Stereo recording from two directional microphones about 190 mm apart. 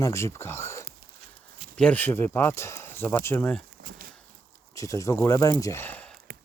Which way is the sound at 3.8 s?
50° right (ahead or behind).